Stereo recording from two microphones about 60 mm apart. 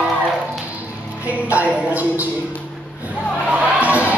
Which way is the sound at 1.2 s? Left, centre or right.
Right.